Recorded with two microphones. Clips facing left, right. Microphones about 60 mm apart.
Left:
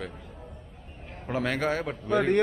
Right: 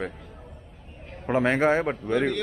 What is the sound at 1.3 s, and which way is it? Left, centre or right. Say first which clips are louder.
A man's voice: right 6 dB; right.